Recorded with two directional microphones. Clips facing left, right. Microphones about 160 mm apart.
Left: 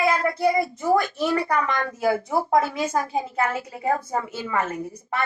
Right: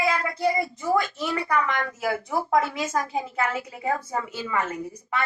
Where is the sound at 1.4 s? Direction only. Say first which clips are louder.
Left 1 dB; 25° left (ahead or behind).